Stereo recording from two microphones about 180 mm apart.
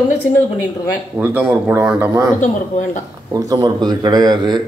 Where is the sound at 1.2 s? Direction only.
10° right (ahead or behind).